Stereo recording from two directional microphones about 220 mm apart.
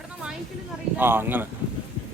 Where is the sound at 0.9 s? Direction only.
10° right (ahead or behind).